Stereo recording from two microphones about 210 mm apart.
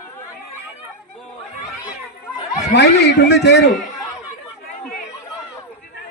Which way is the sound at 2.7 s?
55° left (ahead or behind).